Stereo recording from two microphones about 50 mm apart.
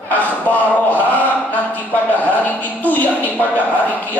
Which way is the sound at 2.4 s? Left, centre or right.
Left.